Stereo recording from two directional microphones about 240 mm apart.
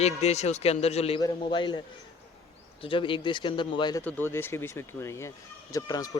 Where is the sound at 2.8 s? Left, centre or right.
Left.